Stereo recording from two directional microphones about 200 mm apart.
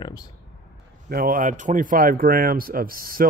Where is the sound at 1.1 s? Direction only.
45° right (ahead or behind).